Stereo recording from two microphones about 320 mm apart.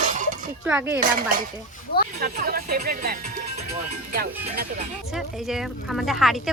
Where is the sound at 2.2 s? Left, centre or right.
Right.